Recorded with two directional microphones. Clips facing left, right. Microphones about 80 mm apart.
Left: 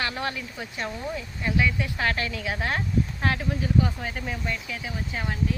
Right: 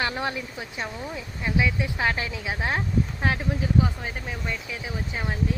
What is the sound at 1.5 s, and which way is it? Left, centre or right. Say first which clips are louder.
Speech: even; centre.